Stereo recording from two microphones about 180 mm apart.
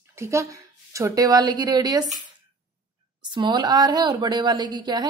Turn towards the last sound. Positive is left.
turn(degrees=-25)  # may be behind; listen again after turning